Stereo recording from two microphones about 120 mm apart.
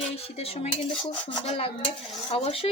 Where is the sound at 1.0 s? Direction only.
55° left (ahead or behind).